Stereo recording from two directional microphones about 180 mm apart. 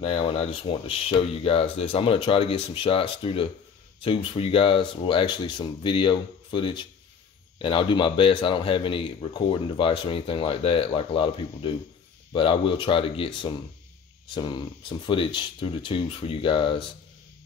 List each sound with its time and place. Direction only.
0.0 s speech: 35° left (ahead or behind)